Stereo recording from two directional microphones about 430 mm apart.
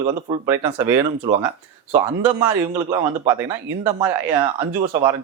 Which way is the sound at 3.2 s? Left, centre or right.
Centre.